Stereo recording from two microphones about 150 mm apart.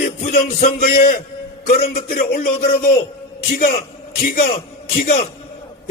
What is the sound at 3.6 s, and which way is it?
Speech, 70° left (ahead or behind).